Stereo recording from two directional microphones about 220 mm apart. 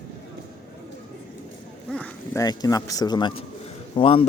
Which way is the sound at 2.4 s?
15° left (ahead or behind).